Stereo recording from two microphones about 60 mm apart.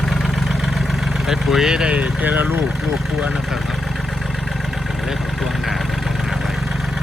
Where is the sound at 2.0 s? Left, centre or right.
Right.